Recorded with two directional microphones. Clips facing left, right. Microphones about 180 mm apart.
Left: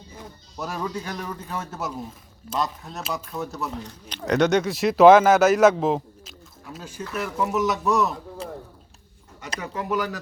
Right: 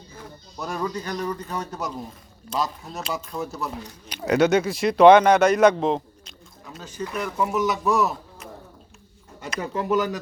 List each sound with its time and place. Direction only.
0.2 s a man's voice: 10° left (ahead or behind)
8.4 s a sound: 30° left (ahead or behind)
9.6 s speech: 30° right (ahead or behind)